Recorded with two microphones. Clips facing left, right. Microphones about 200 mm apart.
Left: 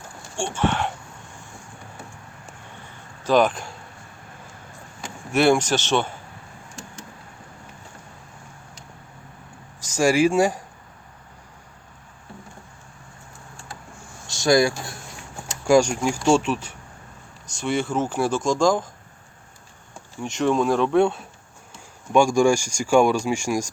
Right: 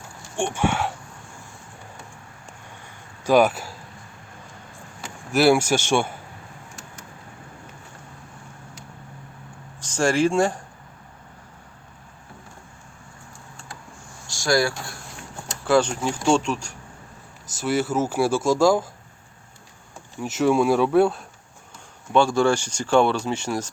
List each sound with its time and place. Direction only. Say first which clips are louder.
0.3 s speech: even; 15° right (ahead or behind)
3.2 s speech: right 1 dB; 10° right (ahead or behind)
5.3 s speech: right 1 dB; 5° right (ahead or behind)
9.8 s speech: left 2 dB; 10° left (ahead or behind)
14.3 s speech: left 3 dB; 20° left (ahead or behind); by 18.9 s 10° right (ahead or behind)
20.1 s speech: right 2 dB; 5° right (ahead or behind)
22.1 s speech: left 2 dB; 10° left (ahead or behind)